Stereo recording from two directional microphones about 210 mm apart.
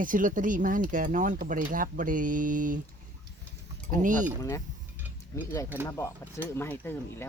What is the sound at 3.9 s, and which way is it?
Speech, 40° right (ahead or behind).